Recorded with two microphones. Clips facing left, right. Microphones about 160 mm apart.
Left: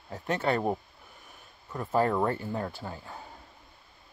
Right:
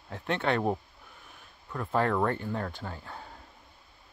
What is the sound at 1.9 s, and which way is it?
Speech, 10° left (ahead or behind).